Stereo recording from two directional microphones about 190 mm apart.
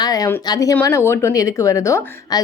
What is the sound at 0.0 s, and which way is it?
Speech, 20° left (ahead or behind).